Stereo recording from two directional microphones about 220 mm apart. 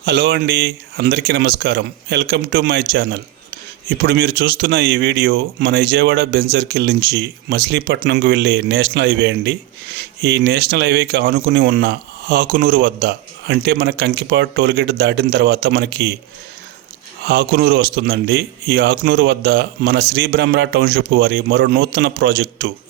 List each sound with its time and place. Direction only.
0.0 s speech: 50° right (ahead or behind)
17.2 s speech: 45° right (ahead or behind)